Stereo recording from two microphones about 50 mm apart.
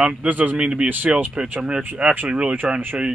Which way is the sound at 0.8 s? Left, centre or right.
Right.